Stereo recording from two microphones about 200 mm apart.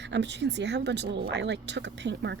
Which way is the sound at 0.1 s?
60° right (ahead or behind).